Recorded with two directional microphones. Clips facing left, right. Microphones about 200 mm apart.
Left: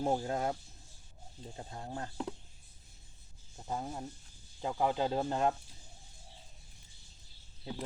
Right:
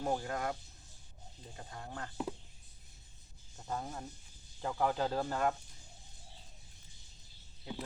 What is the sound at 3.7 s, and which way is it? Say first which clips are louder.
Speech: left 2 dB; 15° left (ahead or behind).